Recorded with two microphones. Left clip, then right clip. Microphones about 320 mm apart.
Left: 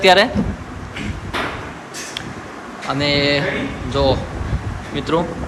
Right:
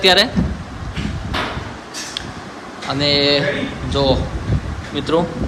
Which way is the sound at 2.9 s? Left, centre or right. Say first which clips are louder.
Right 2 dB; centre.